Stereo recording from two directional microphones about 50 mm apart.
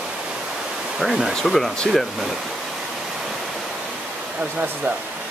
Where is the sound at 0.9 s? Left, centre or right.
Centre.